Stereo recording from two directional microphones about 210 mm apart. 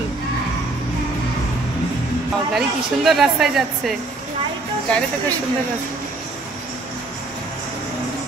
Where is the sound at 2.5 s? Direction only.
Centre (ahead or behind).